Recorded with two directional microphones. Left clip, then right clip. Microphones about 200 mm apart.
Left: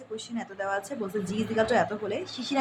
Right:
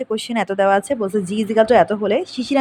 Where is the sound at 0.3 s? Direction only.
50° right (ahead or behind).